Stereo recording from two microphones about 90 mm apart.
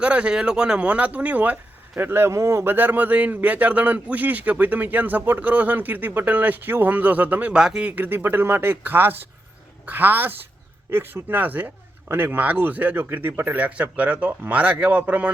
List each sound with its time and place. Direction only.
0.0 s speech: 15° right (ahead or behind)